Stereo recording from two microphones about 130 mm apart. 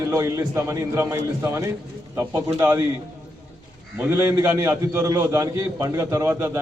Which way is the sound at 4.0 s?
20° right (ahead or behind).